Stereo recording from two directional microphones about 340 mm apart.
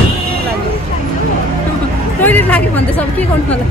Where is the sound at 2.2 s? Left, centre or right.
Centre.